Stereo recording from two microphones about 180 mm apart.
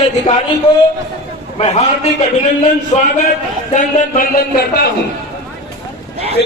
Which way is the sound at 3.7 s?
50° left (ahead or behind).